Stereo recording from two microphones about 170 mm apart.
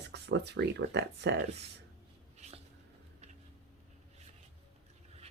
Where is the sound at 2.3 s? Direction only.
40° right (ahead or behind).